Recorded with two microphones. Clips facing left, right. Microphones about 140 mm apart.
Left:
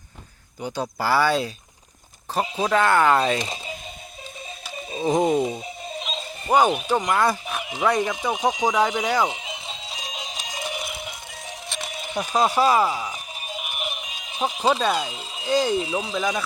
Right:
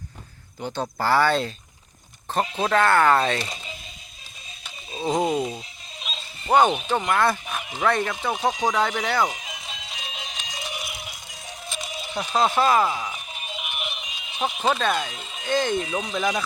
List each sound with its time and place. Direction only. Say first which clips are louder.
0.9 s speech: even; 10° left (ahead or behind)
4.9 s speech: left 3 dB; 20° left (ahead or behind)
6.5 s a sound: even; 5° left (ahead or behind); by 11.3 s 50° left (ahead or behind)
11.7 s a sound: left 1 dB; 60° left (ahead or behind)
12.1 s speech: left 1 dB; 10° left (ahead or behind)
13.3 s music: left 1 dB; 40° left (ahead or behind)
14.7 s speech: left 2 dB; 15° left (ahead or behind)
15.1 s speech: left 2 dB; 30° left (ahead or behind)
15.4 s speech: left 2 dB; 10° left (ahead or behind)
15.8 s speech: left 2 dB; 30° left (ahead or behind)